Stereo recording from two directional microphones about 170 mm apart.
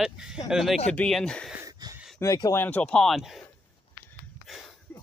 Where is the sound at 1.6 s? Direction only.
20° right (ahead or behind).